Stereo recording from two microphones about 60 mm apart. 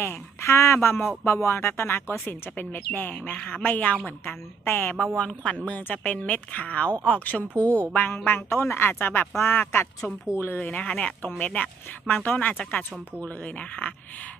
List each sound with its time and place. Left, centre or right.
0.0 s speech: left
4.6 s speech: left
5.1 s speech: centre
5.7 s speech: left
10.6 s speech: left